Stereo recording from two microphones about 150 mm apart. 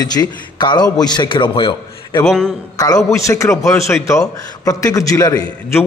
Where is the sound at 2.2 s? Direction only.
5° left (ahead or behind).